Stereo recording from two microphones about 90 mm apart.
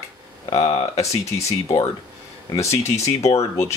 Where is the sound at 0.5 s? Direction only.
50° left (ahead or behind).